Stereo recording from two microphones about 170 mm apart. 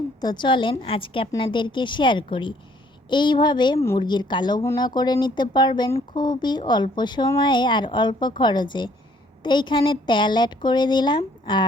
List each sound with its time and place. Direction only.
0.2 s speech: 25° left (ahead or behind)